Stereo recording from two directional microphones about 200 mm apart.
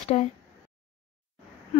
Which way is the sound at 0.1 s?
35° left (ahead or behind).